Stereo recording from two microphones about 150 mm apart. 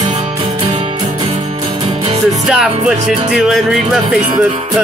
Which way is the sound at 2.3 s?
5° right (ahead or behind).